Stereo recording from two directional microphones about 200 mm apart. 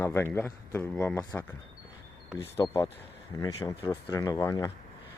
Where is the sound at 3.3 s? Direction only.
15° left (ahead or behind).